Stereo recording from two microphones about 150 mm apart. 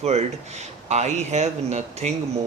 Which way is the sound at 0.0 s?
45° right (ahead or behind).